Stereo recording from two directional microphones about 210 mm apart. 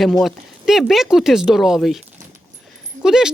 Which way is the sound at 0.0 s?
Centre (ahead or behind).